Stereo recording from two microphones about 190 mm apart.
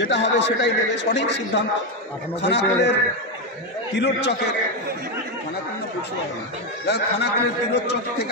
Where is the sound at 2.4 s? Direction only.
65° left (ahead or behind).